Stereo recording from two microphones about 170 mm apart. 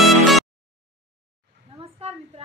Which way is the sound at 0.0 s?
Centre (ahead or behind).